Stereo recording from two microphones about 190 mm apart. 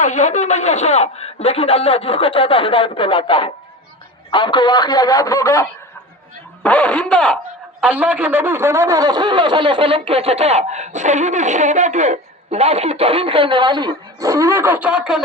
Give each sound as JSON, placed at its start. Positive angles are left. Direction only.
{"t": 0.0, "sound": "a man's voice", "side_deg": 40}
{"t": 6.6, "sound": "speech", "side_deg": 5}